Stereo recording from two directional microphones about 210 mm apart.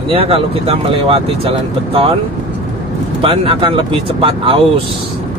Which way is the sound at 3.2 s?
25° right (ahead or behind).